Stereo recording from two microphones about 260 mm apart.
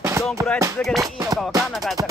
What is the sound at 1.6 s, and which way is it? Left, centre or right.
Music, centre.